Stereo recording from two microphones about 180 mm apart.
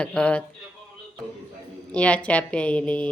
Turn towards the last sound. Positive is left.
turn(degrees=5)  # may be behind; listen again after turning